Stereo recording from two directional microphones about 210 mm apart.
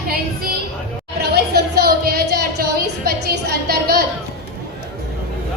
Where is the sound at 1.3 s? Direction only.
50° right (ahead or behind).